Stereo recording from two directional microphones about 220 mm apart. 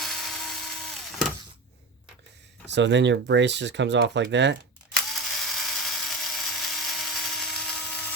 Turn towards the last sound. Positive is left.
turn(degrees=0)  # may be behind; listen again after turning